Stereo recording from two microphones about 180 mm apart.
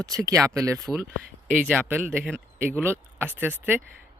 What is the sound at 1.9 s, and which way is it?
Speech, 10° right (ahead or behind).